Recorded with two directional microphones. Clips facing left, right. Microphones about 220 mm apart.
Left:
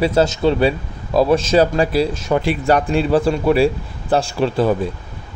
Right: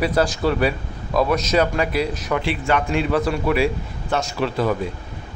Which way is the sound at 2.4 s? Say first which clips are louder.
Left 5 dB; 40° left (ahead or behind).